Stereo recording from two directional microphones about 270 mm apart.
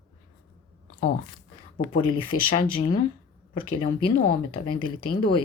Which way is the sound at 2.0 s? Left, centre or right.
Centre.